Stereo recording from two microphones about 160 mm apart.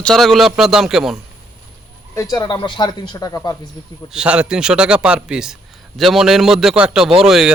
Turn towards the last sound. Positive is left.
turn(degrees=0)  # may be behind; listen again after turning